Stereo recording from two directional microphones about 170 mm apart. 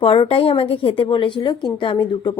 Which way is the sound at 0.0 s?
35° left (ahead or behind).